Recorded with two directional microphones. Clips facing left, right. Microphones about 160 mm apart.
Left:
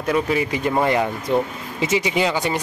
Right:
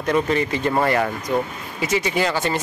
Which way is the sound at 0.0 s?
5° left (ahead or behind).